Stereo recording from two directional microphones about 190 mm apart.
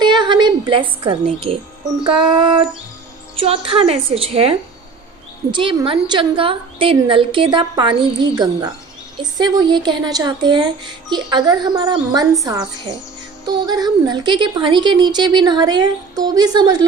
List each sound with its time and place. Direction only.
0.0 s a sound: 25° right (ahead or behind)
2.0 s a woman's voice: 25° right (ahead or behind)
13.4 s speech: 20° right (ahead or behind)